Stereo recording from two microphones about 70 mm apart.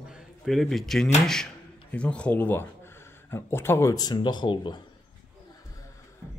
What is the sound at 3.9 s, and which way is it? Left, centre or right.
Speech, left.